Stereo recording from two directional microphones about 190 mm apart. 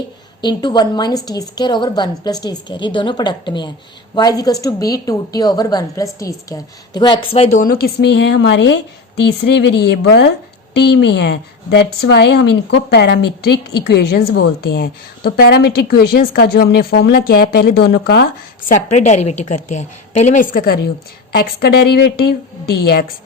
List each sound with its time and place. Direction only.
0.4 s a woman's voice: 20° left (ahead or behind)
7.5 s a woman's voice: 45° left (ahead or behind)
18.7 s a woman's voice: 35° left (ahead or behind); by 23.0 s 55° left (ahead or behind)